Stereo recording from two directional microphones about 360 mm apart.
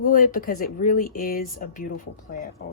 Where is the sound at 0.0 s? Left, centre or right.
Left.